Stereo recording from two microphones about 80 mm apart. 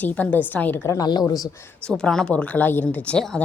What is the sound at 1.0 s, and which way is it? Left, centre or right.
Speech, left.